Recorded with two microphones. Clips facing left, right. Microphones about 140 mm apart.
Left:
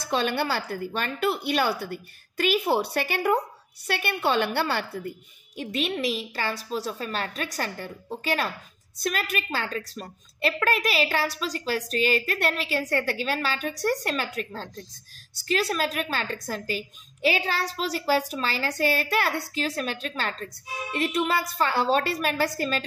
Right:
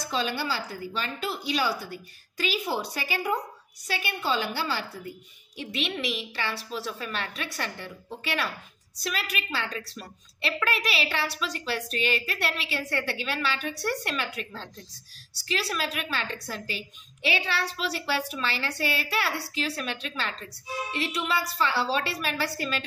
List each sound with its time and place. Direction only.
0.1 s speech: 60° left (ahead or behind)
5.6 s a woman's voice: 45° left (ahead or behind)